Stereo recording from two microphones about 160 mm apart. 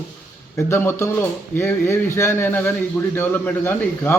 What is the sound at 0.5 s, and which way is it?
Speech, 15° left (ahead or behind).